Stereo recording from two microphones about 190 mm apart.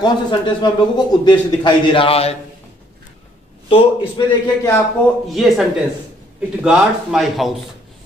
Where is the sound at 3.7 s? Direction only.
30° left (ahead or behind).